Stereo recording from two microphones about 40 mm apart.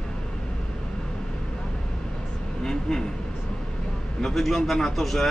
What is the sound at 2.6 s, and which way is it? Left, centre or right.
Vehicle, centre.